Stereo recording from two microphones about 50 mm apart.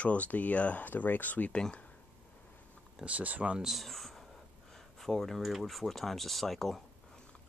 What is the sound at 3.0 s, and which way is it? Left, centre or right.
Speech, right.